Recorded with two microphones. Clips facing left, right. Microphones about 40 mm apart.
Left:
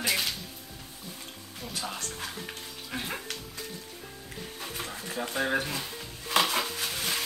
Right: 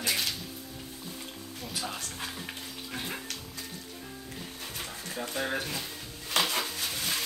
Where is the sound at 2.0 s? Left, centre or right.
Centre.